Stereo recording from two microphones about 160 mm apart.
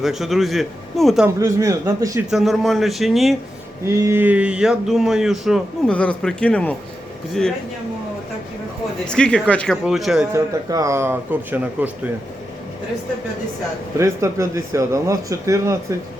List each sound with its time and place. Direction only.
0.0 s speech: centre (ahead or behind)
1.4 s speech: 20° right (ahead or behind)
2.3 s speech: centre (ahead or behind)
3.8 s speech: 15° right (ahead or behind)
5.9 s speech: 10° left (ahead or behind)
9.0 s speech: 5° left (ahead or behind)
10.3 s speech: 20° right (ahead or behind)
14.0 s speech: 20° right (ahead or behind)